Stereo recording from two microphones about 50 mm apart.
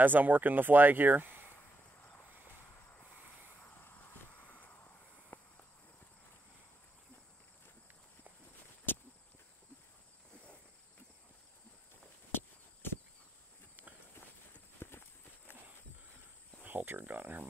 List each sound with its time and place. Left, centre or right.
0.0 s speech: right
3.8 s a sound: left
12.3 s walk: left
14.8 s clip-clop: left
16.6 s cricket: right